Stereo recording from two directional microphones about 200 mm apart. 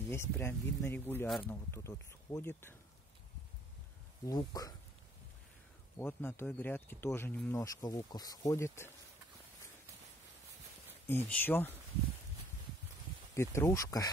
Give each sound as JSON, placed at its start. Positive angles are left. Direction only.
{"t": 0.1, "sound": "speech", "side_deg": 10}
{"t": 4.3, "sound": "speech", "side_deg": 20}
{"t": 5.9, "sound": "speech", "side_deg": 10}
{"t": 11.1, "sound": "speech", "side_deg": 10}
{"t": 13.3, "sound": "speech", "side_deg": 15}